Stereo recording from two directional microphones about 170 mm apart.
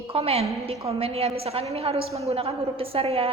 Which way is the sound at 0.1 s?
35° right (ahead or behind).